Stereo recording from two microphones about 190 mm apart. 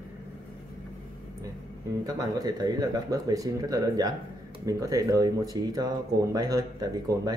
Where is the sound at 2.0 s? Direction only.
20° right (ahead or behind).